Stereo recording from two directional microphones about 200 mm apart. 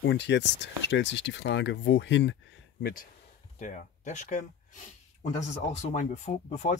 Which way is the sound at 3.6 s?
40° left (ahead or behind).